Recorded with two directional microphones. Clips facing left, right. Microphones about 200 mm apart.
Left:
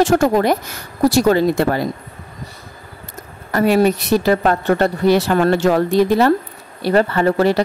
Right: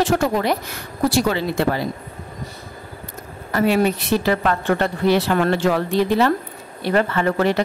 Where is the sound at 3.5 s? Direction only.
40° left (ahead or behind).